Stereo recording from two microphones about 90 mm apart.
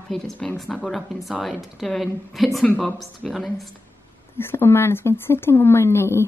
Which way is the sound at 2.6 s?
15° left (ahead or behind).